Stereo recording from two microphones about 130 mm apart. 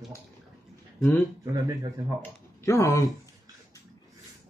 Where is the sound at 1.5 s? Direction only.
25° right (ahead or behind).